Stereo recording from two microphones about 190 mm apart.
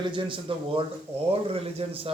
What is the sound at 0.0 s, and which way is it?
Speech, 25° right (ahead or behind).